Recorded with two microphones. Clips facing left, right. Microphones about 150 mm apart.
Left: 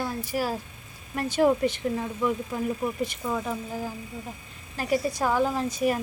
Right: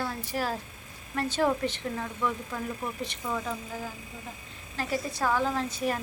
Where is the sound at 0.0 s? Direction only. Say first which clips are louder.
Left 3 dB; 10° left (ahead or behind).